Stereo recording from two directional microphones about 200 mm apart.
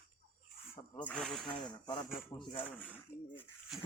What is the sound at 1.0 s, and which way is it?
Speech, 5° left (ahead or behind).